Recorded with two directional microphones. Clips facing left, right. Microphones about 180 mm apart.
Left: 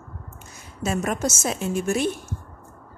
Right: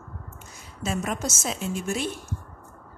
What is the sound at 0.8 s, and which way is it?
Speech, 60° left (ahead or behind).